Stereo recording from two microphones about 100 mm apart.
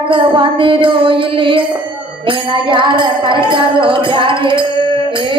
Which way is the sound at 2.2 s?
60° right (ahead or behind).